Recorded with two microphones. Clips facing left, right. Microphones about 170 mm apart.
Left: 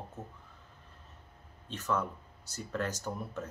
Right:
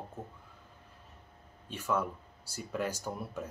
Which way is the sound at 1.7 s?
10° right (ahead or behind).